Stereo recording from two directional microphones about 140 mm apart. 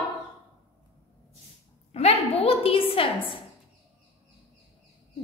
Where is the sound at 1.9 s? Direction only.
45° left (ahead or behind).